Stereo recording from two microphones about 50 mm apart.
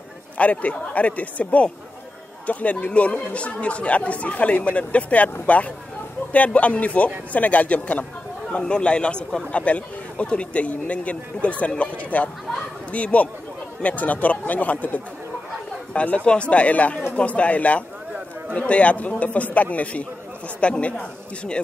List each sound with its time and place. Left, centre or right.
0.4 s speech: left